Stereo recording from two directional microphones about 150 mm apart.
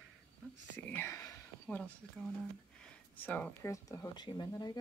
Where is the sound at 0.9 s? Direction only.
15° left (ahead or behind).